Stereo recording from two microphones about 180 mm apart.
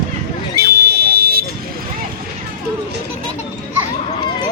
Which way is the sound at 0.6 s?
60° right (ahead or behind).